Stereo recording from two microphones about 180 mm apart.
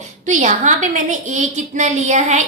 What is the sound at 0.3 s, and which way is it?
A woman's voice, 45° right (ahead or behind).